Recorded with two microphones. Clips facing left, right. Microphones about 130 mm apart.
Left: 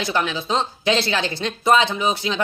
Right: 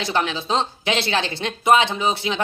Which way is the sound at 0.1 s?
25° right (ahead or behind).